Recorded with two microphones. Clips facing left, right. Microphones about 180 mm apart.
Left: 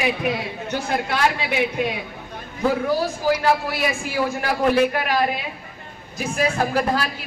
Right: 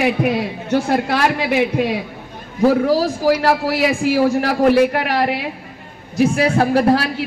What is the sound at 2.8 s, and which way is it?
A man's voice, 85° right.